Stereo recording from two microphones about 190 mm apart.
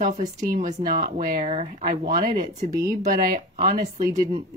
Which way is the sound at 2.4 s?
20° right (ahead or behind).